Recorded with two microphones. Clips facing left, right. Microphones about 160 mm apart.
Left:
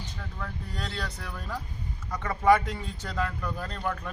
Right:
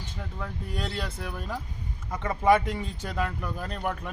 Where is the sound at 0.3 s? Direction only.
15° right (ahead or behind).